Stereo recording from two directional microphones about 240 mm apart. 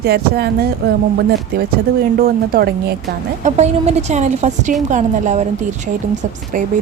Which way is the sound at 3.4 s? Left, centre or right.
Right.